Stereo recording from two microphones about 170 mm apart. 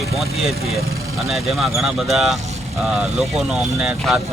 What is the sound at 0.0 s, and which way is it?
Speech, centre (ahead or behind).